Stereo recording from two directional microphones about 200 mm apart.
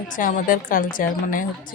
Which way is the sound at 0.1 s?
40° left (ahead or behind).